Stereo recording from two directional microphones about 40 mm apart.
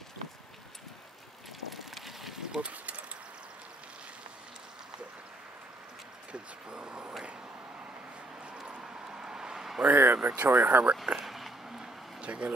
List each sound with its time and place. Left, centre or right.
2.0 s a sound: centre
2.6 s speech: right
6.3 s vehicle: right
8.6 s vehicle: right
9.8 s speech: right
10.1 s speech: right
10.5 s speech: right
11.1 s a sound: centre
12.2 s speech: right